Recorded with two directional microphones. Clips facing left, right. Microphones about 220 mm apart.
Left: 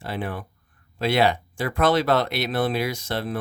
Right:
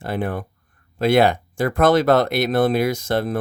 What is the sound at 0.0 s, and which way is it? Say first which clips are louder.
Speech: right 5 dB; 50° right (ahead or behind).